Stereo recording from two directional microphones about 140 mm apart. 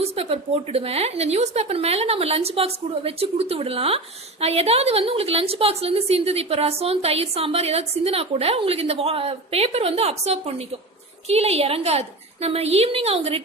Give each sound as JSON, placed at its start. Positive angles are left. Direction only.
{"t": 0.0, "sound": "a woman's voice", "side_deg": -45}